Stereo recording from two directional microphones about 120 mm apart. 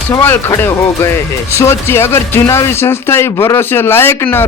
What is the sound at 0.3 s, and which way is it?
Speech, 20° left (ahead or behind).